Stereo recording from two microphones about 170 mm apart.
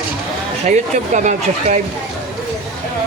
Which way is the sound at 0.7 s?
45° right (ahead or behind).